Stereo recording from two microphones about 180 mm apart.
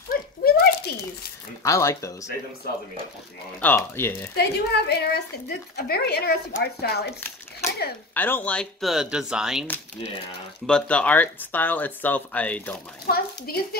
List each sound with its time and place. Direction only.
0.1 s a sound: 60° left (ahead or behind)
1.6 s speech: 15° left (ahead or behind)
3.6 s speech: 10° left (ahead or behind)
4.4 s a woman's voice: 65° left (ahead or behind)
8.1 s speech: 10° left (ahead or behind)
10.7 s speech: 5° left (ahead or behind)
13.0 s a woman's voice: 55° left (ahead or behind)